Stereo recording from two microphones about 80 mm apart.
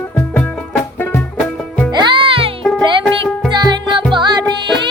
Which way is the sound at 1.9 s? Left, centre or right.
Right.